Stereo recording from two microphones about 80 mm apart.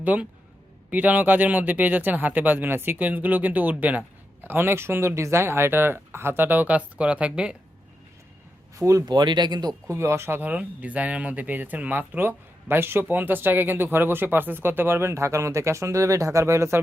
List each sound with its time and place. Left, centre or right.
0.0 s speech: centre
8.8 s speech: right
9.0 s speech: right
9.9 s speech: right